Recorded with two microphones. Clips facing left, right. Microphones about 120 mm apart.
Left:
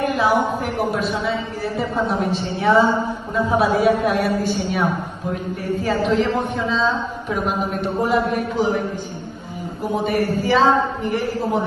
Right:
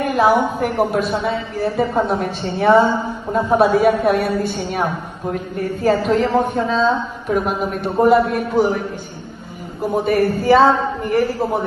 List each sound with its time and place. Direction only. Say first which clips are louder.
0.0 s a woman's voice: right 3 dB; 50° right (ahead or behind)
5.3 s a woman's voice: right 1 dB; 45° right (ahead or behind)
10.0 s a woman's voice: right 5 dB; 50° right (ahead or behind)